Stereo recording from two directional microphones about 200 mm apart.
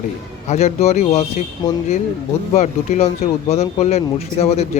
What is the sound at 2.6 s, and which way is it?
Speech, 35° left (ahead or behind).